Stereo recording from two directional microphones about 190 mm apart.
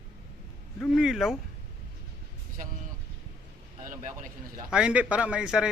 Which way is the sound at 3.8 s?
45° right (ahead or behind).